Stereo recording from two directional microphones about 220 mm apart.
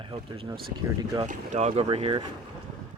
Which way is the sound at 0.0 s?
25° right (ahead or behind).